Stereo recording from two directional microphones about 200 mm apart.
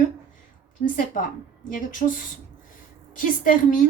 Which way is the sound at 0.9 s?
40° left (ahead or behind).